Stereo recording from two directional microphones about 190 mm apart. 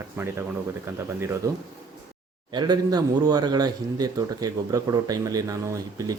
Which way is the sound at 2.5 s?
20° right (ahead or behind).